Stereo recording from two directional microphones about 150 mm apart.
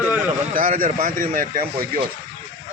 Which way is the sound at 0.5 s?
65° right (ahead or behind).